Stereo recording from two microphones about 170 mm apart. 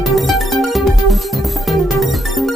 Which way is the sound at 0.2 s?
Centre (ahead or behind).